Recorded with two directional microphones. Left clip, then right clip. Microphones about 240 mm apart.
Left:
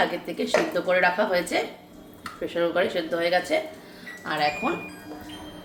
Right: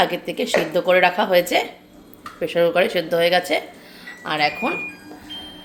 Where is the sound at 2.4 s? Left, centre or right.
Right.